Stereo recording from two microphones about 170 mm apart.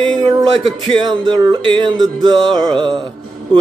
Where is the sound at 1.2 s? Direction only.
25° right (ahead or behind).